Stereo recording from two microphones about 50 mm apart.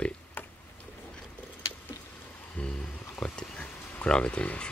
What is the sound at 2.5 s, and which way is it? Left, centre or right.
Music, centre.